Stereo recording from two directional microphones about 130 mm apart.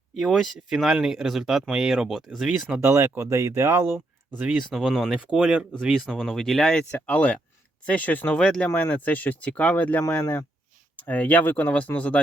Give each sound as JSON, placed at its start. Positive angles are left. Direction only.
{"t": 0.2, "sound": "speech", "side_deg": 0}
{"t": 2.8, "sound": "speech", "side_deg": -20}
{"t": 4.4, "sound": "speech", "side_deg": -5}